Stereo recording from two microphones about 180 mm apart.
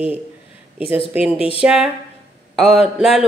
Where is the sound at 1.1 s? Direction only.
5° right (ahead or behind).